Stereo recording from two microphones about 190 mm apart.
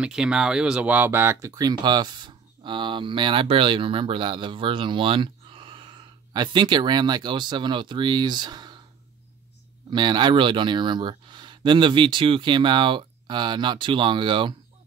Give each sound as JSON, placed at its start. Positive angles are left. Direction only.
{"t": 0.0, "sound": "speech", "side_deg": -5}
{"t": 9.8, "sound": "speech", "side_deg": -25}